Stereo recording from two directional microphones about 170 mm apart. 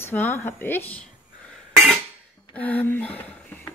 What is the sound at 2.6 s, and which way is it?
Speech, 10° left (ahead or behind).